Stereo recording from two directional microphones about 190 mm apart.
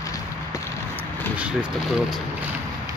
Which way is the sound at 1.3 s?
5° right (ahead or behind).